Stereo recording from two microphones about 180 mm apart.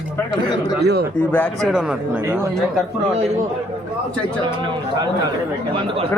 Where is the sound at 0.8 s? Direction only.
65° right (ahead or behind).